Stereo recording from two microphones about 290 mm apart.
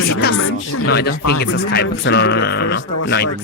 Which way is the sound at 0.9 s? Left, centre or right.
Left.